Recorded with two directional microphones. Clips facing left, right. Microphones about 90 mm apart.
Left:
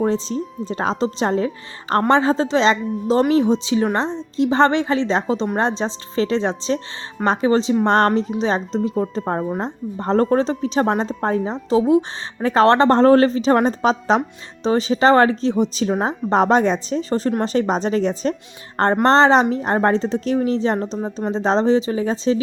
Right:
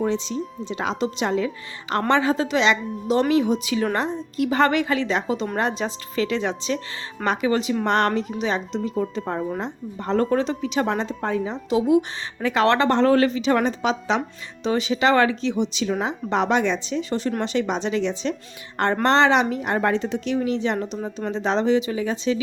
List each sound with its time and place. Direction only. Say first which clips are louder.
0.0 s a woman's voice: left 4 dB; 35° left (ahead or behind)